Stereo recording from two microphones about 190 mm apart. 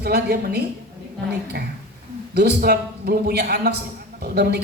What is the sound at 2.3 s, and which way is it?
A man's voice, 60° right (ahead or behind).